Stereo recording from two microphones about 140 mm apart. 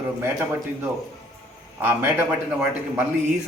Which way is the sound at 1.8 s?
10° right (ahead or behind).